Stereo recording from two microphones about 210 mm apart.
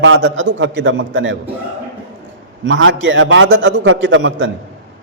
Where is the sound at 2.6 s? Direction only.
65° right (ahead or behind).